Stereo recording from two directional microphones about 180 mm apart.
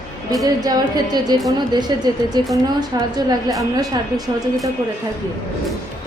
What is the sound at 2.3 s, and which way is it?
Speech, 20° right (ahead or behind).